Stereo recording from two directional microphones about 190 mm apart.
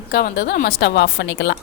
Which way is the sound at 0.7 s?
70° left (ahead or behind).